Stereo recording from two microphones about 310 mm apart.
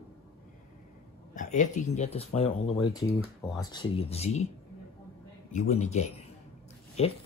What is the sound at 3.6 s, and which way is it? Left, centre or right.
Speech, centre.